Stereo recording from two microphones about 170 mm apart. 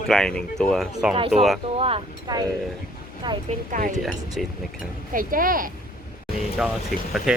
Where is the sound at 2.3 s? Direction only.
25° right (ahead or behind).